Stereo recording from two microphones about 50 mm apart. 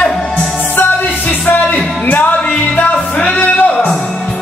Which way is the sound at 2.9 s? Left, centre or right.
Left.